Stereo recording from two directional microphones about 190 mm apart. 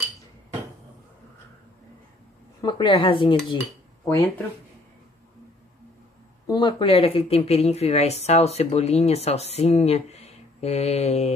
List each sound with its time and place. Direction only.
2.6 s a woman's voice: 25° left (ahead or behind)
4.0 s speech: 15° left (ahead or behind)
6.4 s speech: 25° left (ahead or behind)